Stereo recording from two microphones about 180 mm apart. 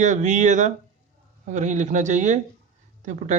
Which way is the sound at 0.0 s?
45° right (ahead or behind).